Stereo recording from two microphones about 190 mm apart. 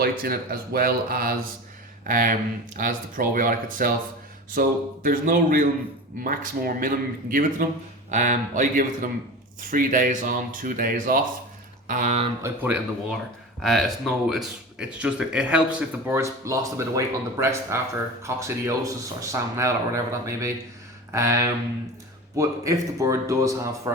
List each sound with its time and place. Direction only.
0.0 s a man's voice: 50° right (ahead or behind)
12.4 s speech: 10° right (ahead or behind)